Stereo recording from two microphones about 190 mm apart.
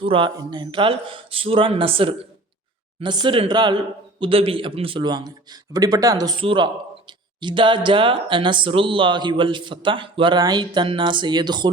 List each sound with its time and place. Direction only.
0.0 s speech: 25° right (ahead or behind)